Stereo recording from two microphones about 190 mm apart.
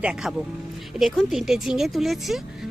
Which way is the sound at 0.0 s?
5° right (ahead or behind).